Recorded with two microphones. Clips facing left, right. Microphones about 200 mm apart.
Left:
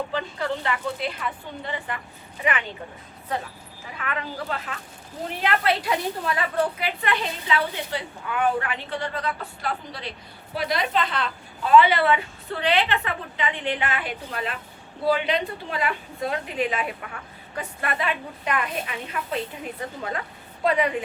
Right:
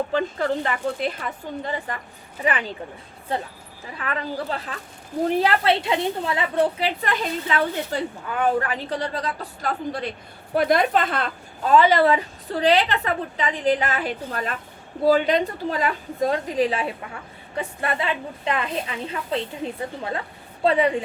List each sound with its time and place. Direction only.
0.1 s a woman's voice: 45° right (ahead or behind)
3.9 s a woman's voice: 35° right (ahead or behind)